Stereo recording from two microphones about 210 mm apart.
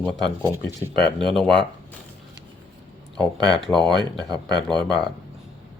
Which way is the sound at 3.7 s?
20° right (ahead or behind).